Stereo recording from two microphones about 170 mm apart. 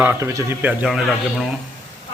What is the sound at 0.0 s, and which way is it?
A man's voice, 15° right (ahead or behind).